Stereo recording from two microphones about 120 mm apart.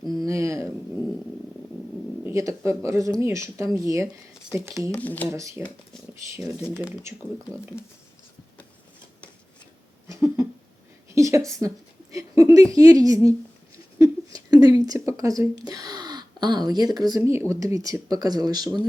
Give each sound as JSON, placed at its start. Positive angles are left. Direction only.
{"t": 0.2, "sound": "a sound", "side_deg": -25}
{"t": 2.2, "sound": "speech", "side_deg": -25}
{"t": 4.9, "sound": "speech", "side_deg": 15}
{"t": 5.3, "sound": "speech", "side_deg": -25}
{"t": 6.7, "sound": "speech", "side_deg": -15}
{"t": 7.7, "sound": "speech", "side_deg": 20}
{"t": 10.1, "sound": "a sound", "side_deg": -25}
{"t": 12.7, "sound": "speech", "side_deg": -30}